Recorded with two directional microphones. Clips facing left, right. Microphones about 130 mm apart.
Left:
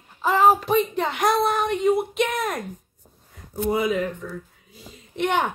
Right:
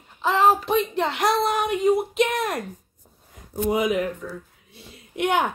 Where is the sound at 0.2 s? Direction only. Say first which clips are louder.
Left 1 dB; 5° left (ahead or behind).